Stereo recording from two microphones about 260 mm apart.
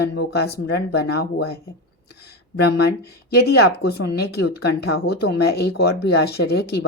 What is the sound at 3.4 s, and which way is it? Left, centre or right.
Speech, left.